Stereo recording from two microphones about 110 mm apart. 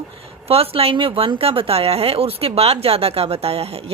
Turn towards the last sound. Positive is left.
turn(degrees=-65)  # may be behind; listen again after turning